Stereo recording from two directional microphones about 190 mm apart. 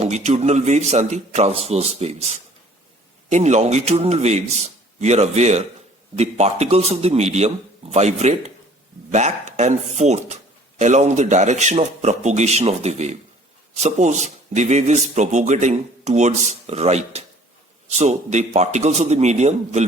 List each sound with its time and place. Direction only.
0.0 s speech: 35° right (ahead or behind)